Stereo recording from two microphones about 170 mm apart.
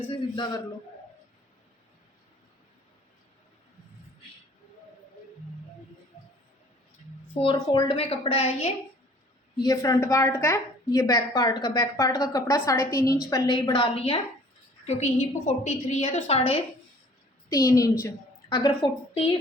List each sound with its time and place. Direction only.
0.0 s a man's voice: 30° left (ahead or behind)
7.3 s a woman's voice: 30° left (ahead or behind)
9.6 s a woman's voice: 20° left (ahead or behind)
14.8 s a woman's voice: 40° left (ahead or behind)
17.5 s a woman's voice: 20° left (ahead or behind)